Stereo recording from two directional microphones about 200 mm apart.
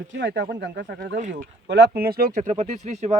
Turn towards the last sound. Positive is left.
turn(degrees=-35)  # may be behind; listen again after turning